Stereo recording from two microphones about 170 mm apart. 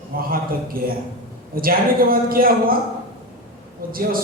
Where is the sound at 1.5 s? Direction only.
60° right (ahead or behind).